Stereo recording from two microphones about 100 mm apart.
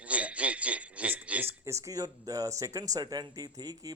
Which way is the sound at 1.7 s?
30° right (ahead or behind).